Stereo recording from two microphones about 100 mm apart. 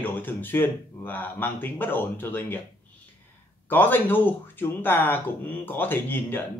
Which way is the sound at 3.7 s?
20° left (ahead or behind).